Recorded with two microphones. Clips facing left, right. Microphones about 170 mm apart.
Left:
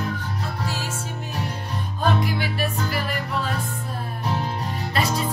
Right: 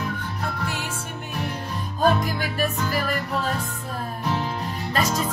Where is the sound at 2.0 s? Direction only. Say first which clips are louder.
Right 2 dB; 40° right (ahead or behind).